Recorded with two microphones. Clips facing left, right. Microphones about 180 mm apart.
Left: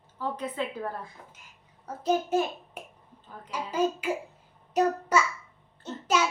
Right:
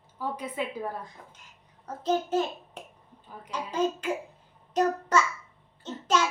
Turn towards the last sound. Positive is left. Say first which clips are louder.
# even
turn(degrees=10)  # may be behind; listen again after turning